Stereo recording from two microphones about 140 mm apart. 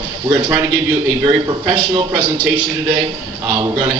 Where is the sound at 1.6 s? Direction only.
35° right (ahead or behind).